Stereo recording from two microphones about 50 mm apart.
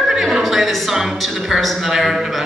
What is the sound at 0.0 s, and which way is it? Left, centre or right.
A woman's voice, centre.